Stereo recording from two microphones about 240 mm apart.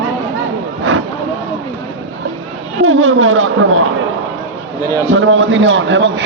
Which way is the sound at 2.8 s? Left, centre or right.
Right.